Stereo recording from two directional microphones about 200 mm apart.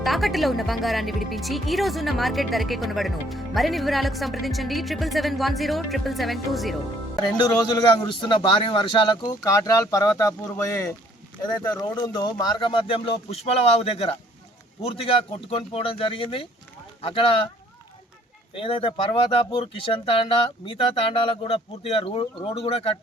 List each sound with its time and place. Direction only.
0.0 s speech: centre (ahead or behind)
7.2 s a man's voice: 20° left (ahead or behind)
18.5 s a man's voice: 25° left (ahead or behind)